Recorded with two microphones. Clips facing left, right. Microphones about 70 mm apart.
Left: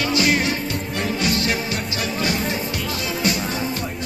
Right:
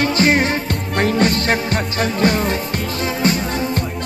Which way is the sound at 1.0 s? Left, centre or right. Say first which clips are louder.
Right 7 dB; right.